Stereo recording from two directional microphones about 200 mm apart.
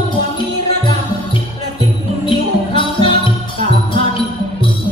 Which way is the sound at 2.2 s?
25° left (ahead or behind).